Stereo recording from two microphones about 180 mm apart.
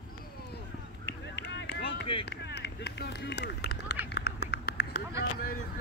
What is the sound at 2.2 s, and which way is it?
Run, 70° left (ahead or behind).